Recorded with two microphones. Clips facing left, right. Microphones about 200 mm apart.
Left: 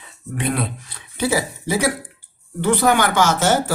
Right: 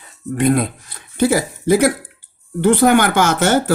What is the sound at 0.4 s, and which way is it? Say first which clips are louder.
Speech: right 7 dB; 45° right (ahead or behind).